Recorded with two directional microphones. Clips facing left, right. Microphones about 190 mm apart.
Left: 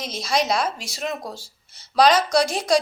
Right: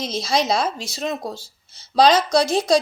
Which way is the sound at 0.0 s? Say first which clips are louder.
Right 2 dB; 25° right (ahead or behind).